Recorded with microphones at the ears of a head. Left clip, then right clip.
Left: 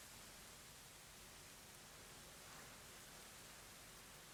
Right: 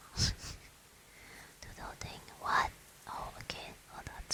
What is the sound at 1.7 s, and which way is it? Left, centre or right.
Whispering, right.